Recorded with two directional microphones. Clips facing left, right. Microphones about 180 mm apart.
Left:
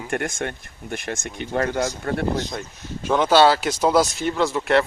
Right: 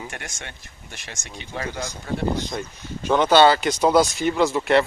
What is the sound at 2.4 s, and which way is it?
Speech, centre (ahead or behind).